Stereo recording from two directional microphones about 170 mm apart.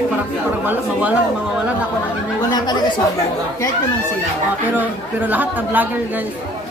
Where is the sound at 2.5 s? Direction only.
25° left (ahead or behind).